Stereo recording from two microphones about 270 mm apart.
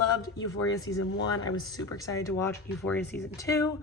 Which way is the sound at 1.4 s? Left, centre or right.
Centre.